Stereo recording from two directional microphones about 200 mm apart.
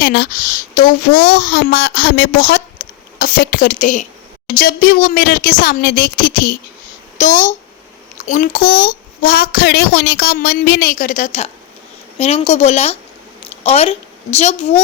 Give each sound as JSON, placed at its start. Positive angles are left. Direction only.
{"t": 0.0, "sound": "a child's voice", "side_deg": 55}